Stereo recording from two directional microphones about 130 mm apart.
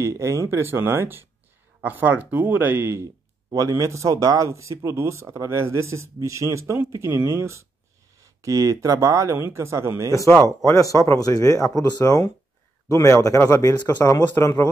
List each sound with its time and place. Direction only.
0.0 s speech: 25° right (ahead or behind)
3.4 s speech: 25° right (ahead or behind)
10.1 s speech: 25° left (ahead or behind)